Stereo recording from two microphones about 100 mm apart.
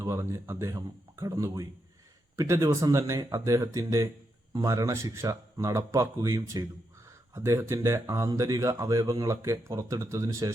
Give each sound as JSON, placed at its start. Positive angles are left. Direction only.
{"t": 0.0, "sound": "speech", "side_deg": -30}